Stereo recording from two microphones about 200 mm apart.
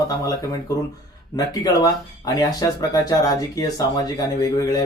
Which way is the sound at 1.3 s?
20° left (ahead or behind).